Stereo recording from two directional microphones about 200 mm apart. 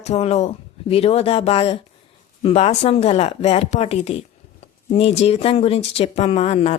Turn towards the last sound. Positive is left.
turn(degrees=30)  # may be behind; listen again after turning